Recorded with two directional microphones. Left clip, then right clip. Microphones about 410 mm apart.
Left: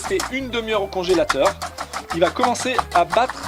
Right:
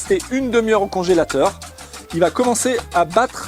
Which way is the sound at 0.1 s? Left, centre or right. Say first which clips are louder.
Right 7 dB; right.